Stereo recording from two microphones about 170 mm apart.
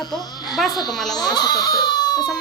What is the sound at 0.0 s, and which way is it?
Baby cry, 25° left (ahead or behind).